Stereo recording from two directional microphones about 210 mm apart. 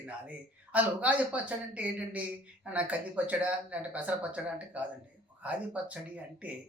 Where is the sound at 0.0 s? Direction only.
5° right (ahead or behind).